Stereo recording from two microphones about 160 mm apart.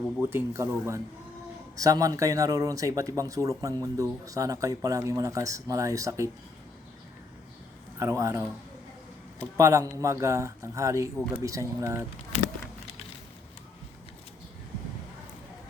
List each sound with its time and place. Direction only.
0.2 s speech: 15° right (ahead or behind)
7.9 s speech: 20° right (ahead or behind)
9.6 s speech: 20° right (ahead or behind)
11.2 s speech: centre (ahead or behind)
11.4 s speech: 20° right (ahead or behind)